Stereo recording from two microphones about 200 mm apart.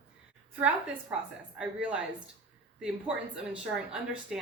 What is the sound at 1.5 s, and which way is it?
A woman's voice, 5° right (ahead or behind).